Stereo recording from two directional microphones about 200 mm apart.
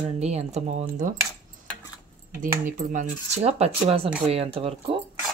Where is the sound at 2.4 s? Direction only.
40° right (ahead or behind).